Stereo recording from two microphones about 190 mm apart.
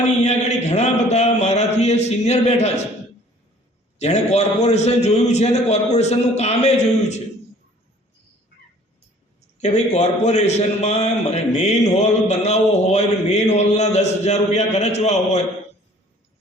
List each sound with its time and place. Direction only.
0.2 s a man's voice: 35° left (ahead or behind)
4.0 s a man's voice: 35° left (ahead or behind)
9.6 s a man's voice: 35° left (ahead or behind)